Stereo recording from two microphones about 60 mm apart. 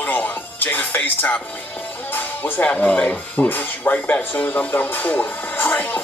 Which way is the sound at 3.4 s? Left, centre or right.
Left.